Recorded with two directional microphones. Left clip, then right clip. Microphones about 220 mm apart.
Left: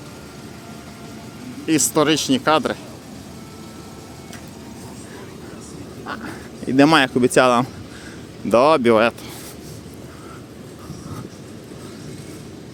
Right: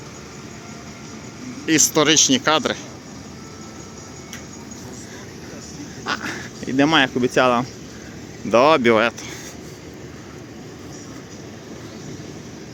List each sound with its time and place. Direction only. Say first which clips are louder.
1.6 s speech: right 1 dB; 10° left (ahead or behind)
6.1 s a sound: right 6 dB; 5° left (ahead or behind)
6.7 s speech: left 2 dB; 20° left (ahead or behind)